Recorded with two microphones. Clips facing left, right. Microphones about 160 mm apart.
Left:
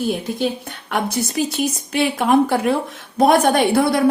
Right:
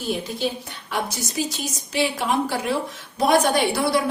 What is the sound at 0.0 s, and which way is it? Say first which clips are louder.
A woman's voice: left 5 dB; 55° left (ahead or behind).